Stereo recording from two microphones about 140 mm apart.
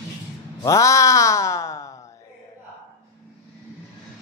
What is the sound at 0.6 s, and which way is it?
Speech, 20° left (ahead or behind).